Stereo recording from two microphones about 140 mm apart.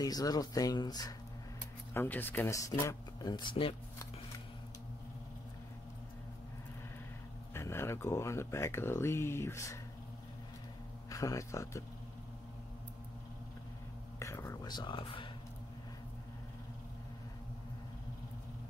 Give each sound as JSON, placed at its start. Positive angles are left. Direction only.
{"t": 0.0, "sound": "speech", "side_deg": 25}
{"t": 2.0, "sound": "speech", "side_deg": 15}
{"t": 7.5, "sound": "speech", "side_deg": 20}
{"t": 11.1, "sound": "speech", "side_deg": 25}
{"t": 14.2, "sound": "speech", "side_deg": 20}